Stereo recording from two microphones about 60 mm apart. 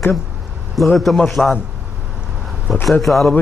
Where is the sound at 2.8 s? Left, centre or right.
Centre.